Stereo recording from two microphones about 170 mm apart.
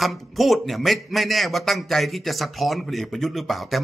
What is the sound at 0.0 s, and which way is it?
Speech, centre (ahead or behind).